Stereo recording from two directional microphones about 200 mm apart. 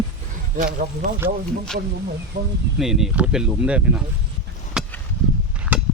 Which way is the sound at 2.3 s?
55° right (ahead or behind).